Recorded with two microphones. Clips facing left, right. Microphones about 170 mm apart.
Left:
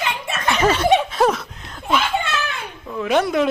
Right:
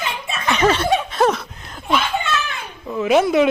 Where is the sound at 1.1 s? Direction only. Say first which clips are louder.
Even; centre (ahead or behind).